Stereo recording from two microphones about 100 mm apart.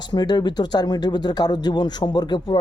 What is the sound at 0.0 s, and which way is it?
Speech, 45° left (ahead or behind).